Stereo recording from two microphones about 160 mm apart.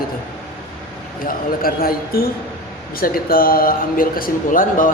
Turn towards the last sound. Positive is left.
turn(degrees=55)  # may be behind; listen again after turning